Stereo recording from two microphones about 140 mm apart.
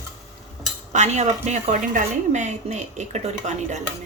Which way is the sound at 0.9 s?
55° right (ahead or behind).